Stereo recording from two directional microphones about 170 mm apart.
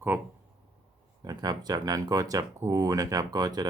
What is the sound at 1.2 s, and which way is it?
Speech, 25° right (ahead or behind).